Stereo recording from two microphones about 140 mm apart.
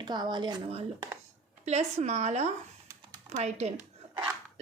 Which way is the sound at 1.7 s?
55° right (ahead or behind).